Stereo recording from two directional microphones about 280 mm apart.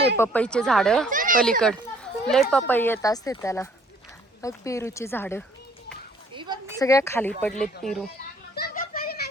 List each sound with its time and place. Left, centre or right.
0.2 s speech: centre
1.1 s a sound: right
2.2 s speech: centre
6.3 s a sound: centre
6.7 s speech: centre
8.5 s children playing: left